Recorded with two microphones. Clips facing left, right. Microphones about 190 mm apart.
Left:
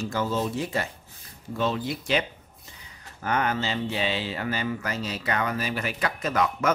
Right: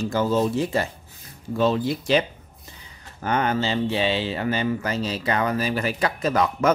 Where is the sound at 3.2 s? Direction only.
30° right (ahead or behind).